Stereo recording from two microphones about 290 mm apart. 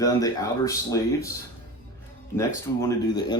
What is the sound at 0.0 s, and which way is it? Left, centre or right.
Speech, centre.